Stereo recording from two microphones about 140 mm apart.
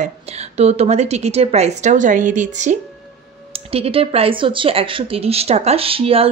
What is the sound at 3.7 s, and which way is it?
Speech, 45° right (ahead or behind).